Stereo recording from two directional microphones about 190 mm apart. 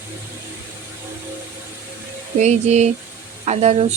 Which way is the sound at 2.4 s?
35° right (ahead or behind).